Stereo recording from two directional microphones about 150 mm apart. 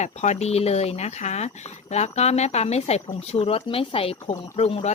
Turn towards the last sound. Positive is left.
turn(degrees=45)  # may be behind; listen again after turning